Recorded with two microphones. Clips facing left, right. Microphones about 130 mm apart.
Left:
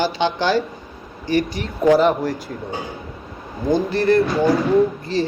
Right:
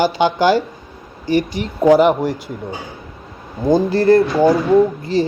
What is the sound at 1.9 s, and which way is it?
Speech, 15° right (ahead or behind).